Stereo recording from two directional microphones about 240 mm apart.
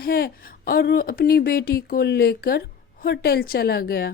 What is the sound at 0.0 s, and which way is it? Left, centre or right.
Speech, left.